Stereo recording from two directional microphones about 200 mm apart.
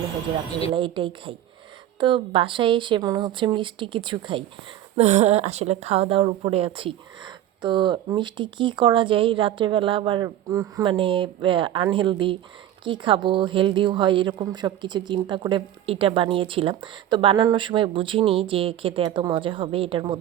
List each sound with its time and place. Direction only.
0.7 s a woman's voice: 25° right (ahead or behind)
4.9 s a woman's voice: 35° right (ahead or behind)